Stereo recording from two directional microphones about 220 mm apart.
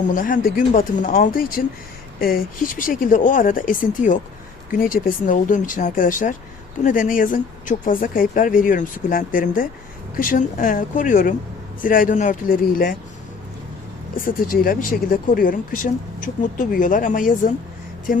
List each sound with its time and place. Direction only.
0.1 s speech: 35° left (ahead or behind)
14.2 s speech: 40° left (ahead or behind)